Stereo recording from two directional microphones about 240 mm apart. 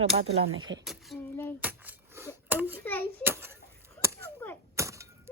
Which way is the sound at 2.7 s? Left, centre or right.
Centre.